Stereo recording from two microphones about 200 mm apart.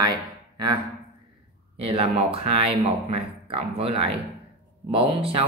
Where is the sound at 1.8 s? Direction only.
30° right (ahead or behind).